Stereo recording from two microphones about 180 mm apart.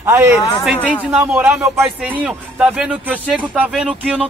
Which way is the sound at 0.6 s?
Centre (ahead or behind).